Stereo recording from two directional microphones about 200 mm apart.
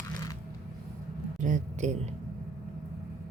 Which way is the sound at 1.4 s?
35° right (ahead or behind).